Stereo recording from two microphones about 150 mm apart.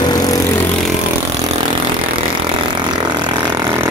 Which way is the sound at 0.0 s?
25° left (ahead or behind).